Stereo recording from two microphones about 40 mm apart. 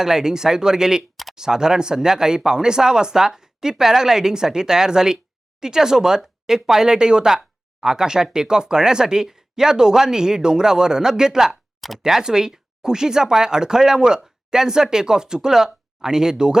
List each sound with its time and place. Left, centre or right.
0.0 s speech: centre
1.1 s a sound: centre
1.4 s speech: centre